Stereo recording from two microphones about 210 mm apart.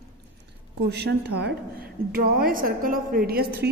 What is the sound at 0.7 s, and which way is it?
A woman's voice, 50° right (ahead or behind).